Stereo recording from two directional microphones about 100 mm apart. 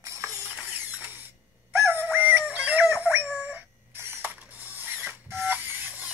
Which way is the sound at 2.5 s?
15° right (ahead or behind).